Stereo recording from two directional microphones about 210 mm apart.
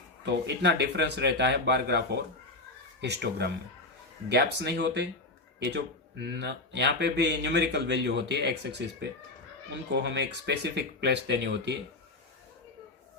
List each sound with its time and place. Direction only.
0.4 s speech: 55° right (ahead or behind)